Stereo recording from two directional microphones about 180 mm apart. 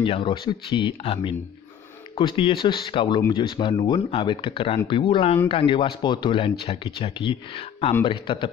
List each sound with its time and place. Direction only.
0.0 s speech: 25° left (ahead or behind)